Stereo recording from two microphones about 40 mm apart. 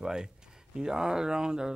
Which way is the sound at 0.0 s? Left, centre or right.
Centre.